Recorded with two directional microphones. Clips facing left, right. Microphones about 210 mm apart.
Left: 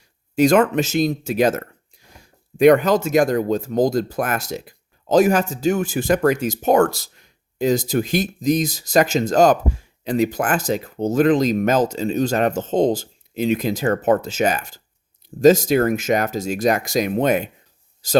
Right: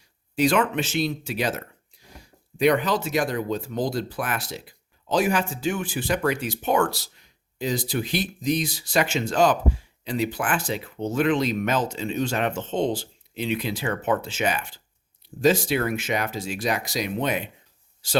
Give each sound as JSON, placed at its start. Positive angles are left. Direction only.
{"t": 0.3, "sound": "speech", "side_deg": 45}